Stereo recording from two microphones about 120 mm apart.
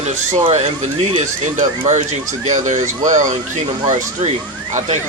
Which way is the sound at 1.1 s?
75° right (ahead or behind).